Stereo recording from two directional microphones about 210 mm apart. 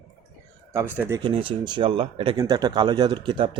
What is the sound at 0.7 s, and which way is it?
Speech, 10° right (ahead or behind).